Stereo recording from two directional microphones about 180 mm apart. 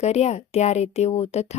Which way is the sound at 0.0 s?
40° left (ahead or behind).